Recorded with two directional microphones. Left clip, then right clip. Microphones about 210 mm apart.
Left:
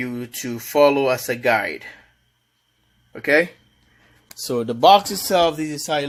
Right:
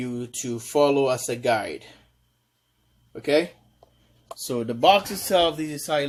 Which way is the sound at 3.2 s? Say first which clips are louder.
Left 5 dB; 15° left (ahead or behind).